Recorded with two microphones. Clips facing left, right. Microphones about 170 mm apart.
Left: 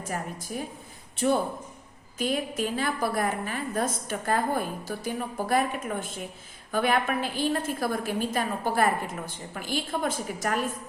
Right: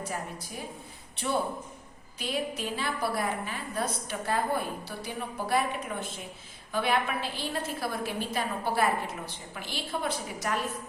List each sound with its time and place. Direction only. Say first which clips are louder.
1.1 s a woman's voice: left 5 dB; 45° left (ahead or behind)